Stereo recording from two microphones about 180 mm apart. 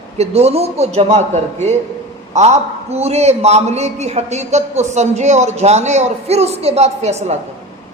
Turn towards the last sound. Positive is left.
turn(degrees=-35)  # may be behind; listen again after turning